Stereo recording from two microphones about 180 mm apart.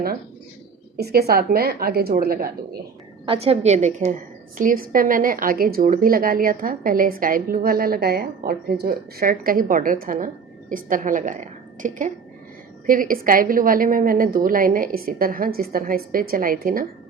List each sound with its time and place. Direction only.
0.9 s a woman's voice: 60° right (ahead or behind)
3.2 s a woman's voice: 35° right (ahead or behind); by 16.8 s 50° right (ahead or behind)